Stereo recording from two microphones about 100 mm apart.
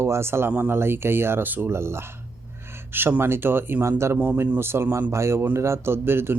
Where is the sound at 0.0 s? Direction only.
25° right (ahead or behind).